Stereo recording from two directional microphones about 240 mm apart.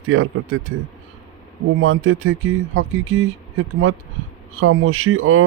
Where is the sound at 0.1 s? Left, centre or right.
Right.